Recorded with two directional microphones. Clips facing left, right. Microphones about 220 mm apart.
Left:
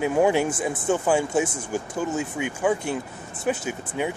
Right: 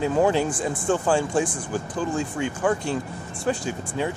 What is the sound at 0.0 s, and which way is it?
Speech, 10° left (ahead or behind).